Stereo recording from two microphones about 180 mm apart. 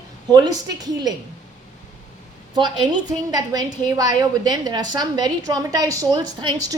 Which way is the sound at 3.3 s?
20° right (ahead or behind).